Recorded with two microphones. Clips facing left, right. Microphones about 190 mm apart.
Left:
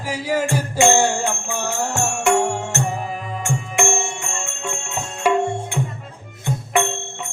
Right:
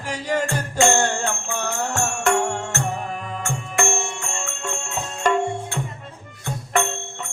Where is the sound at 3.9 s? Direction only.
Centre (ahead or behind).